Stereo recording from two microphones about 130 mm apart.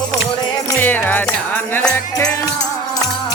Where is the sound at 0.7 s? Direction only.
15° left (ahead or behind).